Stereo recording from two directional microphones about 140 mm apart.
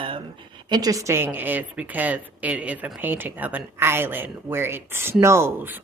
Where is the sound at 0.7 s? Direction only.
25° right (ahead or behind).